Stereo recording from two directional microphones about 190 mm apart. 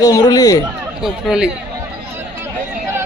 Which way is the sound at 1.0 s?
5° right (ahead or behind).